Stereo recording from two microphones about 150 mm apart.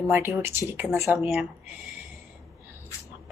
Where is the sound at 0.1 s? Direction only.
15° right (ahead or behind).